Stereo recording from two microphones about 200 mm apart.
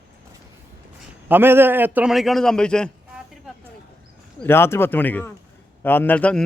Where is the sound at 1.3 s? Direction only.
10° right (ahead or behind).